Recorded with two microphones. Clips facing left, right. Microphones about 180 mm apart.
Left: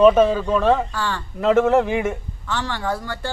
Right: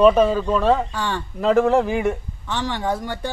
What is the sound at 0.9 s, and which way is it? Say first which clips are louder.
Speech: right 1 dB; 20° right (ahead or behind).